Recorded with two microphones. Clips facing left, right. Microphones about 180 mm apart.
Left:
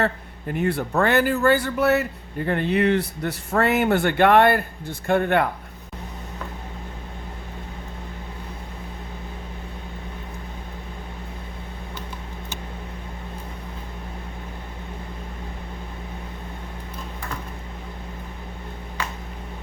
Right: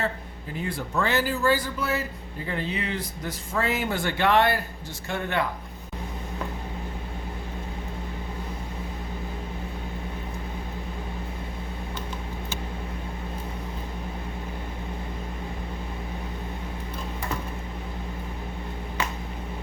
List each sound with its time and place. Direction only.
0.0 s speech: 65° left (ahead or behind)